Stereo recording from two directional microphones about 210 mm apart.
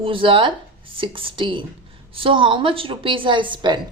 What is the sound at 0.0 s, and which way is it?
A woman's voice, 25° right (ahead or behind).